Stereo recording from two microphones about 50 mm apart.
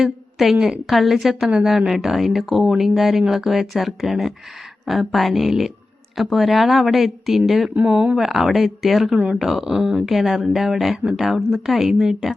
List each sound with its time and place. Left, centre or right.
0.0 s a woman's voice: centre
1.5 s a woman's voice: centre
7.8 s speech: right
8.1 s speech: centre